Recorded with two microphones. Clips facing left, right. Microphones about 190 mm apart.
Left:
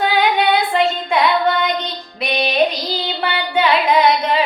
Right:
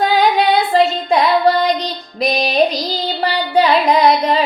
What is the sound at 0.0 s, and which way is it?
Female singing, 35° right (ahead or behind).